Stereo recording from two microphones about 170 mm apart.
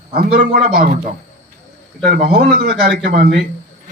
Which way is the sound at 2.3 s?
65° right (ahead or behind).